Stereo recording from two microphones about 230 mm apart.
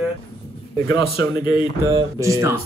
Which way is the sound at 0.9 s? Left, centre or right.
Left.